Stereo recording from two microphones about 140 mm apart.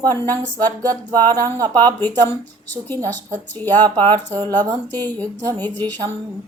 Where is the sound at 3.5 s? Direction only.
10° left (ahead or behind).